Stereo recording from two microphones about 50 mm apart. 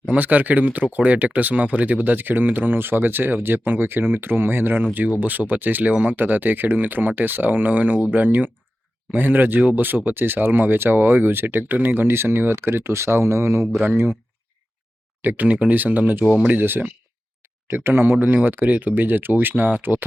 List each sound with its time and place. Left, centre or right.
0.0 s speech: right
15.2 s speech: right
15.4 s speech: right